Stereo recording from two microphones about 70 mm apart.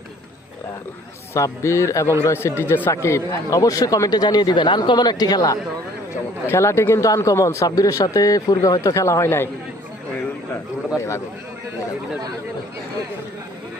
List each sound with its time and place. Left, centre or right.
1.3 s speech: left
2.9 s speech: left
6.5 s speech: left
7.0 s speech: left
8.8 s speech: left
10.9 s speech: left